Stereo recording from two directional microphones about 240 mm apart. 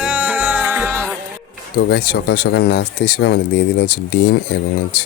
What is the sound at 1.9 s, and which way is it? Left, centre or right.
Speech, left.